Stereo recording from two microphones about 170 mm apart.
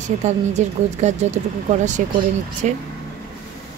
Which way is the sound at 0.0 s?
45° right (ahead or behind).